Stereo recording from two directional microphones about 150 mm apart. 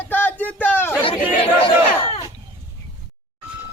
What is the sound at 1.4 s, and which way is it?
Crowd, 40° left (ahead or behind).